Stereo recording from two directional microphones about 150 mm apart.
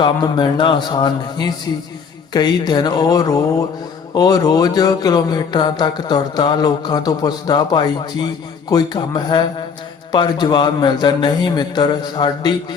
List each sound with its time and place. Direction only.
0.0 s speech: 30° left (ahead or behind)